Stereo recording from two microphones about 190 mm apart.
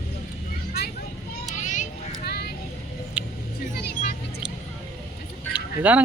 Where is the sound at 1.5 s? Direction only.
40° left (ahead or behind).